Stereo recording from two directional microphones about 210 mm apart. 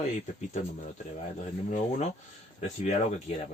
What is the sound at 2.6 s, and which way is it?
Speech, 35° left (ahead or behind).